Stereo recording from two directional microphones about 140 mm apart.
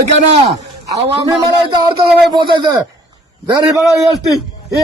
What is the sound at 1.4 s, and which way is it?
A man's voice, 35° right (ahead or behind).